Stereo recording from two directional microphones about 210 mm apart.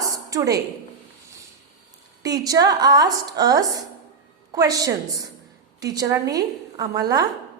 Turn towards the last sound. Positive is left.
turn(degrees=-15)  # may be behind; listen again after turning